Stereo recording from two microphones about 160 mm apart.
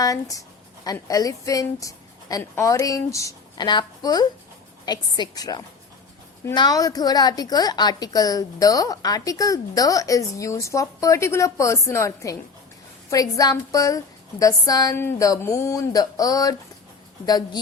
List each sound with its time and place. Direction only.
0.0 s a woman's voice: 20° left (ahead or behind)